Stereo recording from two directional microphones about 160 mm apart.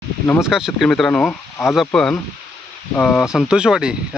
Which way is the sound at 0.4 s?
5° right (ahead or behind).